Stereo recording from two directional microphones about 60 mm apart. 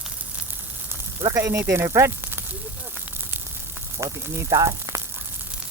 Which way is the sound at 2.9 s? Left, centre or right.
Right.